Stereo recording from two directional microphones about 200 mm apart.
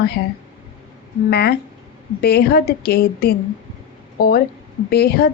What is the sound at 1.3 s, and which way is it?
A woman's voice, 55° left (ahead or behind).